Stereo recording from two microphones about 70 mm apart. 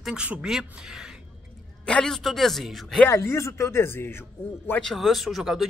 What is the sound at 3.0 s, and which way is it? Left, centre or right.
Speech, left.